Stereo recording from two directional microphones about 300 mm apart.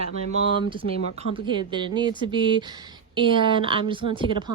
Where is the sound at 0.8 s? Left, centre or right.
Left.